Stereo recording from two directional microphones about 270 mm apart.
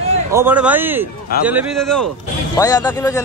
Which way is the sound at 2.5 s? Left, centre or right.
Centre.